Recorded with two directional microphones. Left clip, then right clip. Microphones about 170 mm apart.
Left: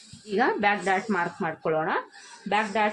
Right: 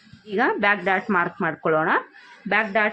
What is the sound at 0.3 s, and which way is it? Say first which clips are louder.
Speech: right 3 dB; 10° right (ahead or behind).